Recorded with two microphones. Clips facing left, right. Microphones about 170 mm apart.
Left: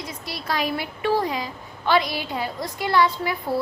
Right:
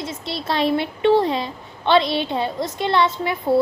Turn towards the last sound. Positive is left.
turn(degrees=-20)  # may be behind; listen again after turning